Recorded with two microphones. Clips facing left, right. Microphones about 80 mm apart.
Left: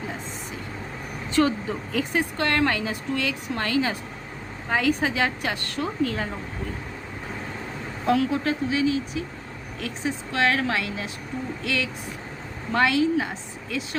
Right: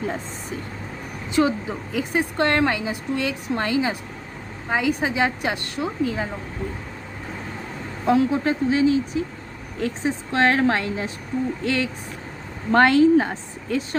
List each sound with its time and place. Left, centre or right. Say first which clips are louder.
1.3 s a woman's voice: right 1 dB; centre
8.0 s a woman's voice: right 3 dB; right
12.7 s speech: right 6 dB; right